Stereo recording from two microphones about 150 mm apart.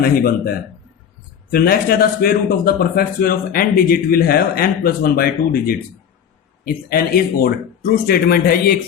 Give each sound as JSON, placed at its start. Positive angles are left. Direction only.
{"t": 0.0, "sound": "speech", "side_deg": 80}